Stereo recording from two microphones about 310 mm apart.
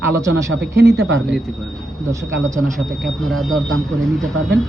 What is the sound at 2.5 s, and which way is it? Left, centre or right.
Speech, centre.